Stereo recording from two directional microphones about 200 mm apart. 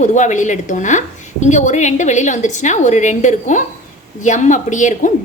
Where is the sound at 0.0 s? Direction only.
35° left (ahead or behind).